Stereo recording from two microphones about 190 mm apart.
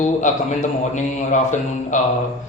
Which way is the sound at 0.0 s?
40° left (ahead or behind).